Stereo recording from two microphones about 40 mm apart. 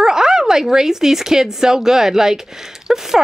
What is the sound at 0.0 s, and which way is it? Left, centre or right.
Speech, centre.